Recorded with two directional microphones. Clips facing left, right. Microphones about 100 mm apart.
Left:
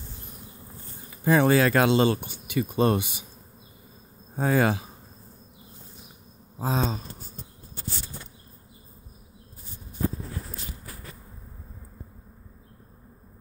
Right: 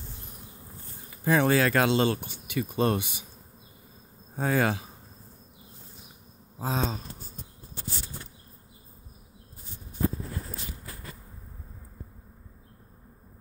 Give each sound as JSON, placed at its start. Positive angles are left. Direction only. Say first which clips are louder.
{"t": 1.2, "sound": "speech", "louder": "left 3 dB", "side_deg": 15}
{"t": 4.4, "sound": "speech", "louder": "left 3 dB", "side_deg": 15}
{"t": 6.6, "sound": "speech", "louder": "left 3 dB", "side_deg": 5}